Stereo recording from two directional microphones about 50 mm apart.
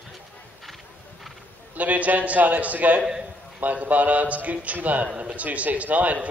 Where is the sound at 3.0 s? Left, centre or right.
Centre.